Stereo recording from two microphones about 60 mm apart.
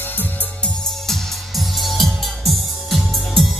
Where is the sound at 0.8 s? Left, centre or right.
Centre.